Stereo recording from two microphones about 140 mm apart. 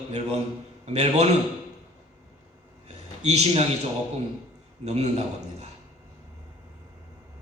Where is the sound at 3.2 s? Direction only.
50° right (ahead or behind).